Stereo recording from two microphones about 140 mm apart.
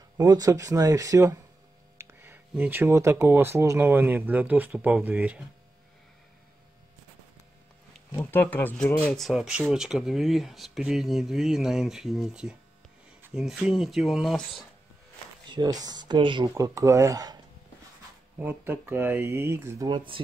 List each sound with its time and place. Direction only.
0.2 s speech: 25° right (ahead or behind)
8.1 s speech: 20° left (ahead or behind); by 14.7 s centre (ahead or behind)
15.5 s speech: 30° right (ahead or behind)
16.5 s speech: 25° right (ahead or behind)
18.4 s speech: 15° right (ahead or behind)